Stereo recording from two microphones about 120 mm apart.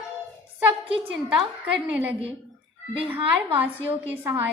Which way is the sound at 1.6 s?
15° right (ahead or behind).